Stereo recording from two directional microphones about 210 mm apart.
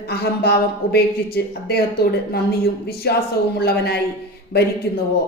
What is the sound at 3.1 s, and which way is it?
Speech, 50° left (ahead or behind).